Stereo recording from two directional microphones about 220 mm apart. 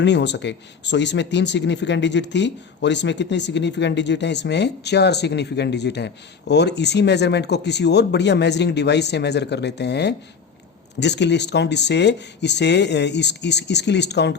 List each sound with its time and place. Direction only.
0.0 s speech: 50° left (ahead or behind)